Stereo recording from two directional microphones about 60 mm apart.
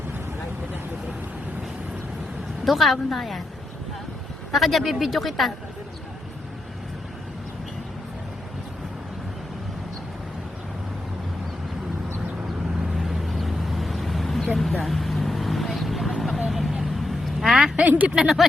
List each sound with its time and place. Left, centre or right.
2.6 s speech: centre
4.5 s speech: centre
13.0 s vehicle: centre
17.8 s speech: right
18.2 s speech: centre